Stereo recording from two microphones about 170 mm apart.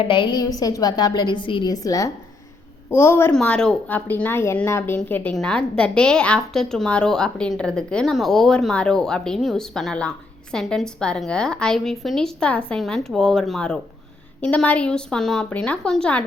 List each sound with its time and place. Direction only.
0.0 s a woman's voice: 30° left (ahead or behind); by 16.2 s 5° left (ahead or behind)